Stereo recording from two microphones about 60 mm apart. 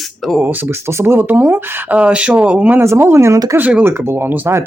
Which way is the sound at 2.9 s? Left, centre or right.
Right.